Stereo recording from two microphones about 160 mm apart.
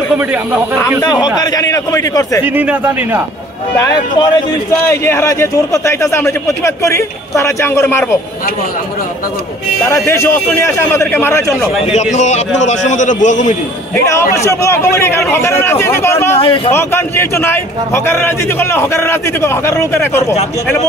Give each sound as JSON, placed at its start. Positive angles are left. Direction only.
{"t": 1.4, "sound": "a man's voice", "side_deg": 20}
{"t": 2.4, "sound": "speech", "side_deg": -10}
{"t": 3.7, "sound": "speech", "side_deg": 20}
{"t": 9.8, "sound": "speech", "side_deg": 15}
{"t": 11.8, "sound": "a man's voice", "side_deg": 45}
{"t": 14.3, "sound": "speech", "side_deg": 20}
{"t": 16.3, "sound": "speech", "side_deg": 35}
{"t": 16.7, "sound": "speech", "side_deg": 15}